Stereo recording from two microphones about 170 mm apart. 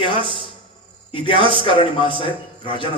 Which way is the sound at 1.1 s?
30° left (ahead or behind).